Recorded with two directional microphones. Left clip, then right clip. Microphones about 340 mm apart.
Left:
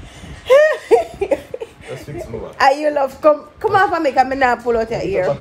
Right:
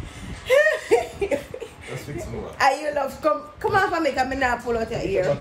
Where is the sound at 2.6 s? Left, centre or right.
Left.